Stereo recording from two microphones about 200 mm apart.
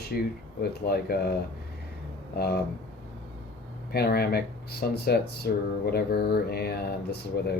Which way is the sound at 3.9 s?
50° left (ahead or behind).